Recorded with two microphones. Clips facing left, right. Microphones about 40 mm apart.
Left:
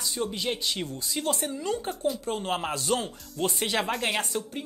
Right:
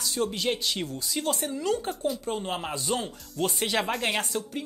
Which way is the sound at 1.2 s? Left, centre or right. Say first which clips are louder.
Even; centre.